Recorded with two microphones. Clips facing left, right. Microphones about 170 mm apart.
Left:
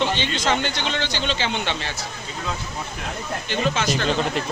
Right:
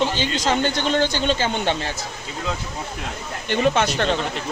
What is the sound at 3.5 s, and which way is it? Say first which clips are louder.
Speech: right 4 dB; 60° right (ahead or behind).